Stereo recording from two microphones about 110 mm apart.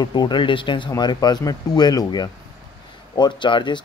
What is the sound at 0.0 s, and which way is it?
Speech, 40° left (ahead or behind).